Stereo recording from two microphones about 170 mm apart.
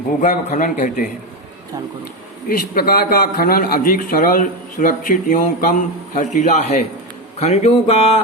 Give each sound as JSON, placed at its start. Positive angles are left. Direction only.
{"t": 0.2, "sound": "a man's voice", "side_deg": 50}
{"t": 2.5, "sound": "a man's voice", "side_deg": 60}
{"t": 7.3, "sound": "a sound", "side_deg": 40}